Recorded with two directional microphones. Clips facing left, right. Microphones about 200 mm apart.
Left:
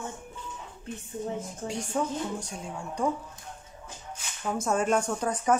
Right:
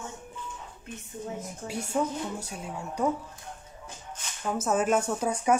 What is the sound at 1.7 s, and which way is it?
A woman's voice, 5° right (ahead or behind).